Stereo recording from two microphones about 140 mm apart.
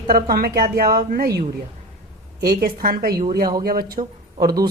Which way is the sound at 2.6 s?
90° right.